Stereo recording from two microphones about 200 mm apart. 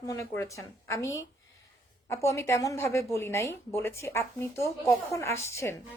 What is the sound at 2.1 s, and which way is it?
A woman's voice, 15° left (ahead or behind).